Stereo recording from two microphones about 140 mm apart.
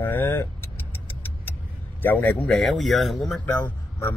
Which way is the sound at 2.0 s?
10° left (ahead or behind).